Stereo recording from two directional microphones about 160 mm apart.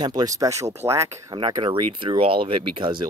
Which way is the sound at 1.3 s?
30° right (ahead or behind).